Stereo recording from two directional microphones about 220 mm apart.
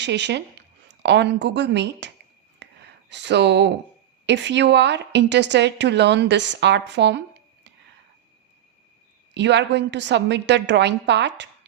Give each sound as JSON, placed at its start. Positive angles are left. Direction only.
{"t": 0.0, "sound": "speech", "side_deg": -50}
{"t": 2.6, "sound": "a sound", "side_deg": -50}
{"t": 4.3, "sound": "speech", "side_deg": -50}
{"t": 9.3, "sound": "speech", "side_deg": -50}